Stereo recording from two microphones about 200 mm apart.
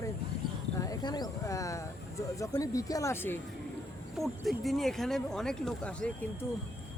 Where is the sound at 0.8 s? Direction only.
20° left (ahead or behind).